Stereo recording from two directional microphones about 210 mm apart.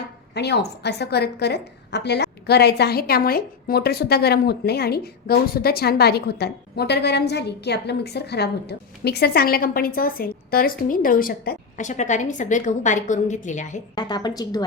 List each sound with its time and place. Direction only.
0.3 s a woman's voice: 55° left (ahead or behind); by 13.8 s 35° left (ahead or behind)
13.9 s a woman's voice: 20° left (ahead or behind)